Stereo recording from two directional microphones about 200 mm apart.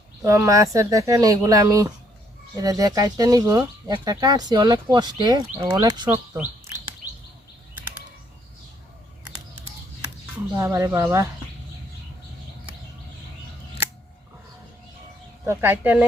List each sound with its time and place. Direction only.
0.3 s speech: 15° right (ahead or behind)
10.6 s speech: 15° right (ahead or behind)
15.4 s speech: 10° right (ahead or behind)